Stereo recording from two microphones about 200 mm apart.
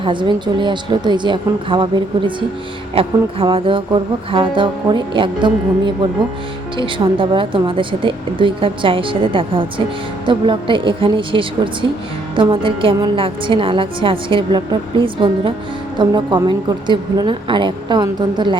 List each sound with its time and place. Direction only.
0.0 s a woman's voice: 25° right (ahead or behind)